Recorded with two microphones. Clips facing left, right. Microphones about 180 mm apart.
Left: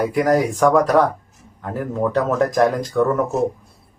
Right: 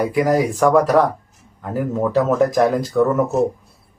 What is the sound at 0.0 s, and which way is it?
Speech, centre (ahead or behind).